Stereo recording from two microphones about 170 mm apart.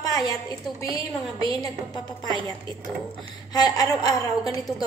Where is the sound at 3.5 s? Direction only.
20° left (ahead or behind).